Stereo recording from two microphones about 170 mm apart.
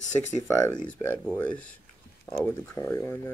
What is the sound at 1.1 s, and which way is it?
Speech, 10° left (ahead or behind).